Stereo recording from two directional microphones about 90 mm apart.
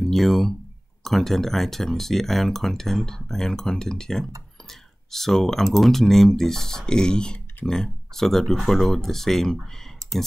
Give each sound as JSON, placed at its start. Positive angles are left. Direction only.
{"t": 0.1, "sound": "speech", "side_deg": 0}